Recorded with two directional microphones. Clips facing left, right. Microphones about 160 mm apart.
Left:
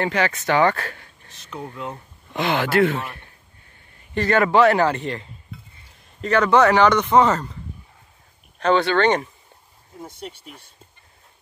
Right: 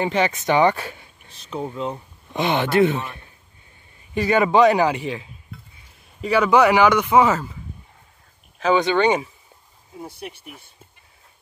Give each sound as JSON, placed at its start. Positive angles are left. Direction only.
{"t": 0.0, "sound": "speech", "side_deg": -20}
{"t": 1.3, "sound": "speech", "side_deg": -30}
{"t": 4.1, "sound": "a man's voice", "side_deg": -10}
{"t": 8.7, "sound": "speech", "side_deg": -15}